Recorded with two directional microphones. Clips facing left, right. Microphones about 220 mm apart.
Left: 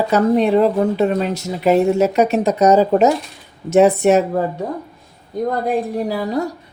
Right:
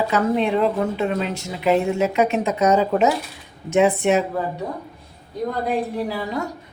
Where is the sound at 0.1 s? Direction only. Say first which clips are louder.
Left 9 dB; 40° left (ahead or behind).